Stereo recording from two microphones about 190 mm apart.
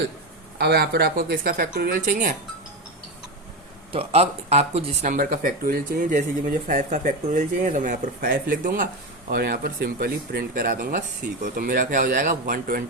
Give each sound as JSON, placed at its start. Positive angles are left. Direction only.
{"t": 0.6, "sound": "speech", "side_deg": -60}
{"t": 3.9, "sound": "speech", "side_deg": -35}
{"t": 5.1, "sound": "speech", "side_deg": -45}